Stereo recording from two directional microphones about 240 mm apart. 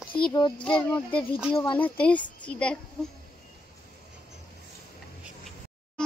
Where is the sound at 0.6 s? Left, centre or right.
Centre.